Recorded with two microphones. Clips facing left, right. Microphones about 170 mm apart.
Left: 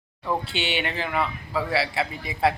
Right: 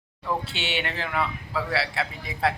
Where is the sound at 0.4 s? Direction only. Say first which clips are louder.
Left 3 dB; centre (ahead or behind).